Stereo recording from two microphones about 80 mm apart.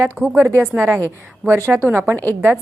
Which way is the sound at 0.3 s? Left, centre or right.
Right.